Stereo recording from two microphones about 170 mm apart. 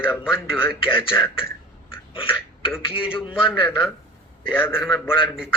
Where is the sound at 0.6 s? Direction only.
30° left (ahead or behind).